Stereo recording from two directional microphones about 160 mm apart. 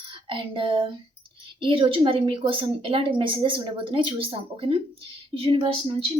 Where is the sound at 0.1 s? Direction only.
35° right (ahead or behind).